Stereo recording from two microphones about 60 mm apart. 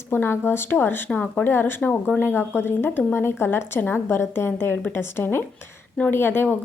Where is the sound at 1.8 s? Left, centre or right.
Left.